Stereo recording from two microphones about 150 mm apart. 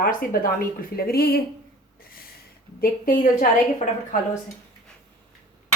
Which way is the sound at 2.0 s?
80° left.